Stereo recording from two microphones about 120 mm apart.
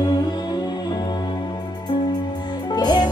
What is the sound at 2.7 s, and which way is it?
Music, 35° left (ahead or behind).